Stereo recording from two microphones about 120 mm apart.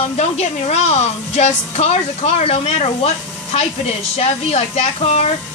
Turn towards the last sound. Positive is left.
turn(degrees=60)  # may be behind; listen again after turning